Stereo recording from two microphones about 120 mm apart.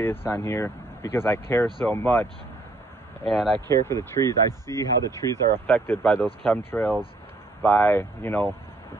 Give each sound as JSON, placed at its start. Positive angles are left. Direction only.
{"t": 0.0, "sound": "speech", "side_deg": 20}
{"t": 3.3, "sound": "speech", "side_deg": 0}
{"t": 3.6, "sound": "speech", "side_deg": 20}